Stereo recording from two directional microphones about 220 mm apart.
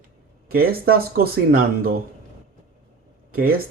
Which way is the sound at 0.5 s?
45° right (ahead or behind).